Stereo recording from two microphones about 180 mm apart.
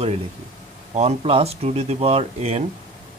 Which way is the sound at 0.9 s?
35° right (ahead or behind).